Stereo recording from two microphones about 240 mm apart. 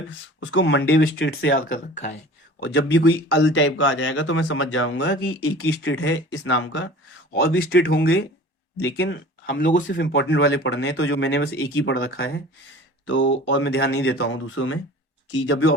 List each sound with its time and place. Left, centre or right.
0.1 s speech: left
2.6 s speech: left
7.3 s speech: left
9.7 s speech: left
10.1 s speech: left